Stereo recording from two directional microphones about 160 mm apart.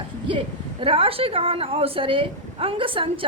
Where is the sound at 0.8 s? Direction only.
35° right (ahead or behind).